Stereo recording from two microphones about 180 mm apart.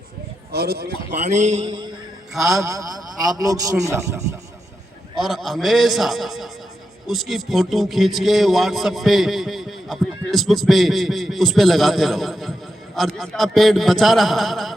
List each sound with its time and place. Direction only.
0.5 s speech: 60° right (ahead or behind)
1.1 s a man's voice: 40° right (ahead or behind)
2.3 s a man's voice: centre (ahead or behind)
2.6 s a man's voice: 15° right (ahead or behind)
5.1 s a man's voice: centre (ahead or behind)